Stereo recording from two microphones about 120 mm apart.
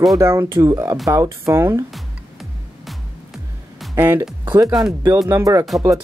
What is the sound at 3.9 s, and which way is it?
Speech, 20° right (ahead or behind).